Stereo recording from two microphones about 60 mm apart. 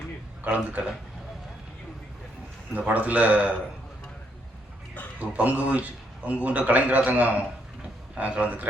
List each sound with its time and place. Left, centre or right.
0.5 s a man's voice: right
2.7 s a man's voice: right
5.2 s a man's voice: right